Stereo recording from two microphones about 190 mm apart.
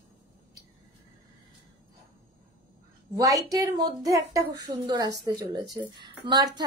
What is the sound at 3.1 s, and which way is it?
Speech, 20° right (ahead or behind).